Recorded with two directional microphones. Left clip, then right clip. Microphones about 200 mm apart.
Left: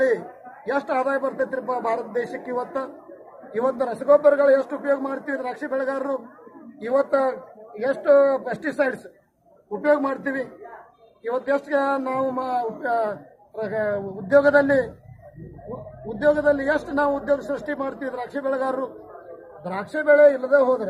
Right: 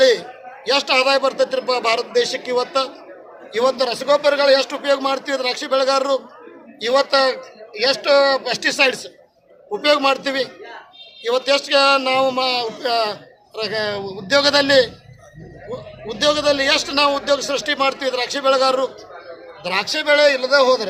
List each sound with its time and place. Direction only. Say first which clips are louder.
0.6 s a man's voice: right 7 dB; 30° right (ahead or behind)
9.8 s a man's voice: right 5 dB; 30° right (ahead or behind)
16.0 s a man's voice: right 2 dB; 35° right (ahead or behind)